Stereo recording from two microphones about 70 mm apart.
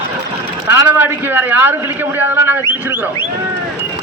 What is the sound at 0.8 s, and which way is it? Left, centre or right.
A man's voice, right.